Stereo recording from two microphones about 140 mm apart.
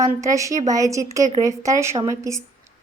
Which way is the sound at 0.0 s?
25° right (ahead or behind).